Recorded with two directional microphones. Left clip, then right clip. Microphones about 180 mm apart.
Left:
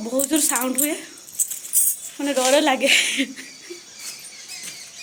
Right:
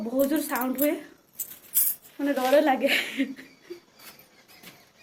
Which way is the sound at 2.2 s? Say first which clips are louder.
Left 3 dB; 25° left (ahead or behind).